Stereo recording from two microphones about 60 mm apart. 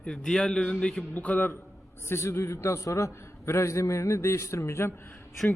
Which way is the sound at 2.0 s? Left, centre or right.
Left.